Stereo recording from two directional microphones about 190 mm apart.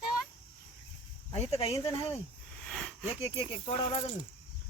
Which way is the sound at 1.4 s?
35° left (ahead or behind).